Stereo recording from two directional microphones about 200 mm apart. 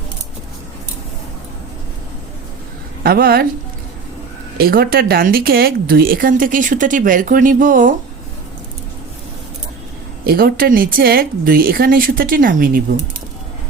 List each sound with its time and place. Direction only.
3.0 s speech: 50° right (ahead or behind)
4.5 s speech: 50° right (ahead or behind)
10.2 s speech: 50° right (ahead or behind)